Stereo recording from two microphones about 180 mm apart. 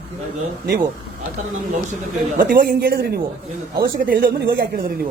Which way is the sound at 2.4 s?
50° right (ahead or behind).